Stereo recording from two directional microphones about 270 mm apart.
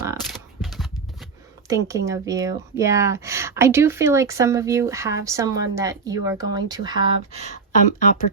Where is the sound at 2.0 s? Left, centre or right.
Centre.